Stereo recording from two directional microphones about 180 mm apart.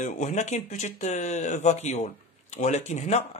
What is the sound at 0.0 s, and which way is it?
Speech, 45° left (ahead or behind).